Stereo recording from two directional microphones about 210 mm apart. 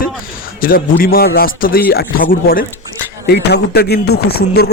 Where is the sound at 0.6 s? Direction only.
45° left (ahead or behind).